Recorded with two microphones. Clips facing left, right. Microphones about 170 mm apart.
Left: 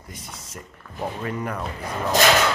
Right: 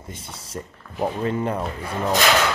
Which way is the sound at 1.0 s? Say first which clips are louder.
Right 5 dB; 25° right (ahead or behind).